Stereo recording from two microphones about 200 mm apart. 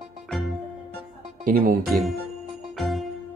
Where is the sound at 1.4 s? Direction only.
45° right (ahead or behind).